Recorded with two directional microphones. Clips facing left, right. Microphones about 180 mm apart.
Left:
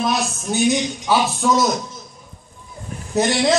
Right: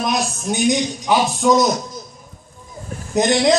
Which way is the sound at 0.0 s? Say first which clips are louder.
Even; 15° right (ahead or behind).